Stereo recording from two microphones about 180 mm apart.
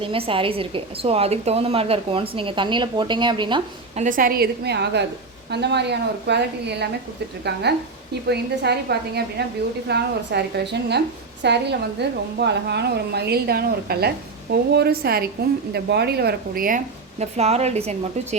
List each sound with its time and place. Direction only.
0.0 s a woman's voice: 30° right (ahead or behind)
4.0 s a woman's voice: 50° right (ahead or behind)